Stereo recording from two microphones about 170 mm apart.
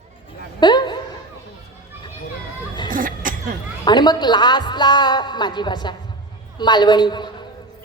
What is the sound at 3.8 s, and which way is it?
A woman's voice, 25° left (ahead or behind).